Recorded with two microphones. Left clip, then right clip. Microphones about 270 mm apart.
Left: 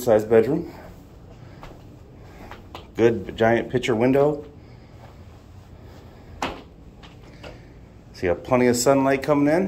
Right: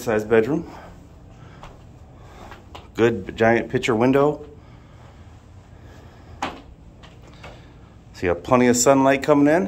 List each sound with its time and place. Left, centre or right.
0.0 s speech: centre
3.0 s speech: centre
8.2 s speech: centre